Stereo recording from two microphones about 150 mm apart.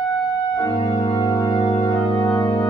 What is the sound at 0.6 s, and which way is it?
Organ, 30° left (ahead or behind).